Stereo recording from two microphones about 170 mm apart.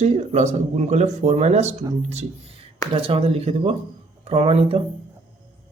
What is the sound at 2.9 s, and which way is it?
A man's voice, 35° right (ahead or behind).